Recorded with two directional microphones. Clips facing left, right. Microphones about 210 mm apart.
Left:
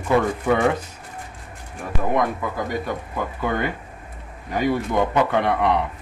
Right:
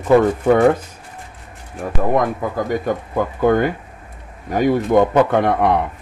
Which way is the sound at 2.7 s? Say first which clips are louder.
Right 6 dB; 45° right (ahead or behind).